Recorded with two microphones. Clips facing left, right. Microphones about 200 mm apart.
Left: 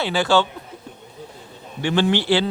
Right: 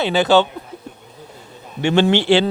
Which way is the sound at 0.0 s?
20° right (ahead or behind).